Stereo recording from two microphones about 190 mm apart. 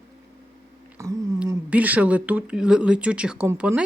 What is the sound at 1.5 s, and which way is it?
Speech, 10° right (ahead or behind).